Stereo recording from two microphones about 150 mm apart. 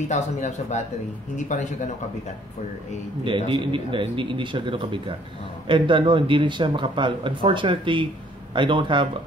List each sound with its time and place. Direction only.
0.1 s speech: 50° left (ahead or behind)
3.3 s speech: 35° right (ahead or behind)